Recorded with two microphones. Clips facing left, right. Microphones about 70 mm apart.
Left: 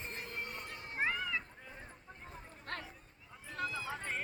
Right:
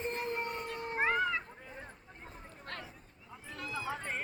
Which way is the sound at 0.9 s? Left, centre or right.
Right.